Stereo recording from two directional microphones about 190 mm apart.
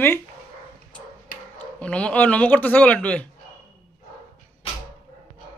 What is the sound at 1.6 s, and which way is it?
A man's voice, 5° left (ahead or behind).